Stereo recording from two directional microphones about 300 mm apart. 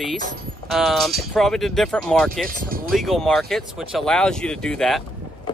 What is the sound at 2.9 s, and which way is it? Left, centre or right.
Speech, centre.